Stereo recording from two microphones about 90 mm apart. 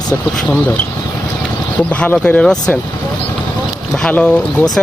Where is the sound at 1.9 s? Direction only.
15° left (ahead or behind).